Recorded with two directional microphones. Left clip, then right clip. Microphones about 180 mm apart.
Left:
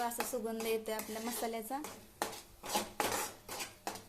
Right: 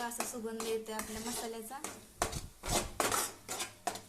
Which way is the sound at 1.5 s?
30° left (ahead or behind).